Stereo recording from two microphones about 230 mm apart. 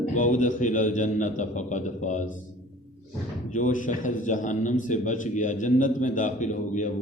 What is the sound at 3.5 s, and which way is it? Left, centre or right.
A man's voice, left.